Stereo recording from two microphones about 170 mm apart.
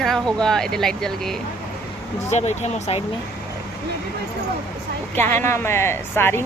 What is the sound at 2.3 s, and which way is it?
Speech, 40° left (ahead or behind).